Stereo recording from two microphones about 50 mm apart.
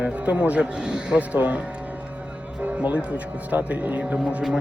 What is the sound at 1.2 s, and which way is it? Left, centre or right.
Speech, right.